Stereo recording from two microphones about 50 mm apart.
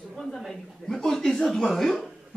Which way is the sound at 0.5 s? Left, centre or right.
Centre.